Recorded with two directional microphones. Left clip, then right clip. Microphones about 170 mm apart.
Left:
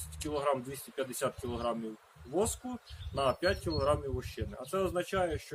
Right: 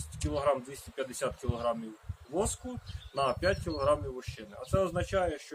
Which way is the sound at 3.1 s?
10° right (ahead or behind).